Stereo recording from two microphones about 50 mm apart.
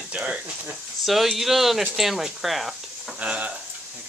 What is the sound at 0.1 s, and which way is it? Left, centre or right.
Speech, right.